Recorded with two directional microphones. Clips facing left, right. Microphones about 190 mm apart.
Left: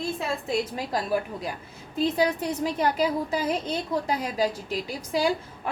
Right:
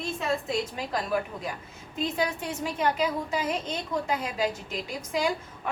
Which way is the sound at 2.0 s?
35° left (ahead or behind).